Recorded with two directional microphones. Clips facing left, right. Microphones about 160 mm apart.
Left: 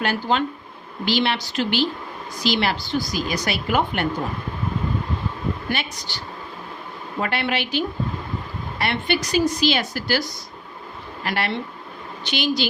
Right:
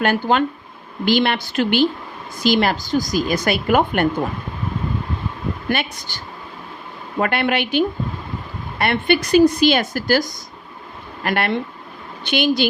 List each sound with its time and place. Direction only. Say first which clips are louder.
0.0 s a woman's voice: right 4 dB; 55° right (ahead or behind)
5.6 s speech: right 4 dB; 50° right (ahead or behind)
7.2 s a woman's voice: right 5 dB; 55° right (ahead or behind)